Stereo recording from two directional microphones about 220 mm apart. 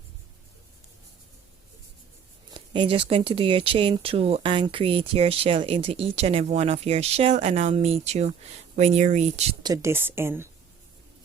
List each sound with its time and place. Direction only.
2.5 s speech: 25° right (ahead or behind)
9.6 s speech: 15° right (ahead or behind)